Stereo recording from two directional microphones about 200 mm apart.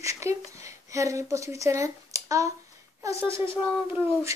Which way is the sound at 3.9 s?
15° right (ahead or behind).